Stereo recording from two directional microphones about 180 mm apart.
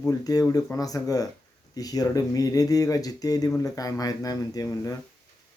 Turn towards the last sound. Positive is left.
turn(degrees=20)  # may be behind; listen again after turning